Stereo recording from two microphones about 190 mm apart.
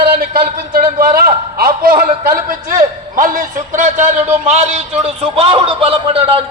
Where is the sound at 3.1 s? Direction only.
45° right (ahead or behind).